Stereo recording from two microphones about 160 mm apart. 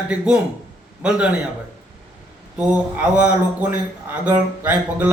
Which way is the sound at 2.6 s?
5° right (ahead or behind).